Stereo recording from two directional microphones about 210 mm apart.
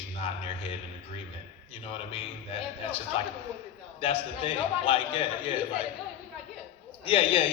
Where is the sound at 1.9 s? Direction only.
25° left (ahead or behind).